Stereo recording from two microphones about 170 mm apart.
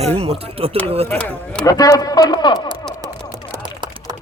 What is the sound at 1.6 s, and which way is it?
Speech, 20° left (ahead or behind).